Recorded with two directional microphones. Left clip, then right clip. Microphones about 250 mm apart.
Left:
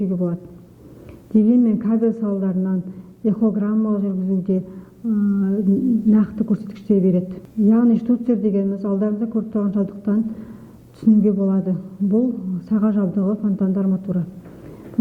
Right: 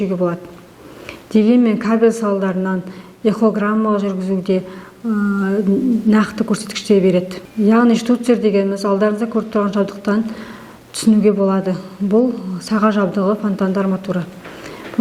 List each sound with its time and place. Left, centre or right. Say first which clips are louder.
1.3 s a woman's voice: right 4 dB; centre